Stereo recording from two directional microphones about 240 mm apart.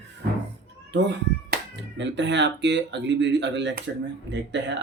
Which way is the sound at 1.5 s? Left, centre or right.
Right.